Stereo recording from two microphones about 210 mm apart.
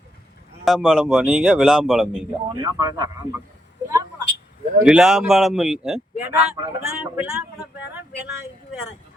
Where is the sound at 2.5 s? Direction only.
20° right (ahead or behind).